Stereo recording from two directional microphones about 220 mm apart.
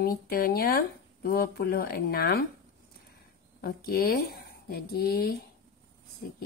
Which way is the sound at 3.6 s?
40° left (ahead or behind).